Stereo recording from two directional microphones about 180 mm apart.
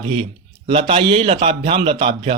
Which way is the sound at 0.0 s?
30° right (ahead or behind).